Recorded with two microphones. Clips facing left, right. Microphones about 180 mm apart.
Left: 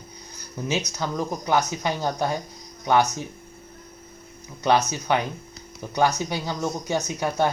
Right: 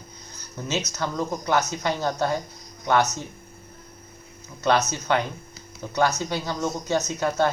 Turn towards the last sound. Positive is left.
turn(degrees=15)  # may be behind; listen again after turning